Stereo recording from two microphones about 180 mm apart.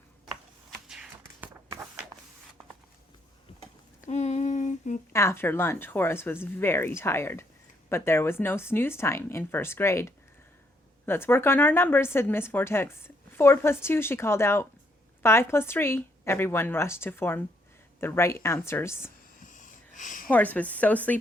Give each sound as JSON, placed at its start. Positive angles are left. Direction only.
{"t": 0.7, "sound": "a sound", "side_deg": -5}
{"t": 4.0, "sound": "humming", "side_deg": 40}
{"t": 5.1, "sound": "speech", "side_deg": 15}
{"t": 19.4, "sound": "wheeze", "side_deg": 45}
{"t": 20.2, "sound": "speech", "side_deg": 10}